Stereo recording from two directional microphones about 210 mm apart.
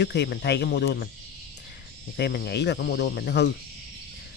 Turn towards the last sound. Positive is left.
turn(degrees=50)  # may be behind; listen again after turning